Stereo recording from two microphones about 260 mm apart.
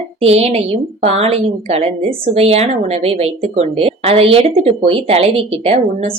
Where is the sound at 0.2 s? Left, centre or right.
Right.